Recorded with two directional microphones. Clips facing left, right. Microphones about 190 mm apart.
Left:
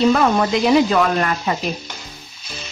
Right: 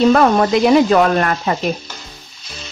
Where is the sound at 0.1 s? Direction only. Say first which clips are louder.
Right 4 dB; 50° right (ahead or behind).